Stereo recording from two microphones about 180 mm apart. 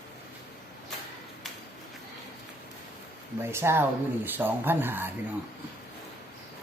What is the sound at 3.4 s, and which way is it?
Speech, 15° right (ahead or behind).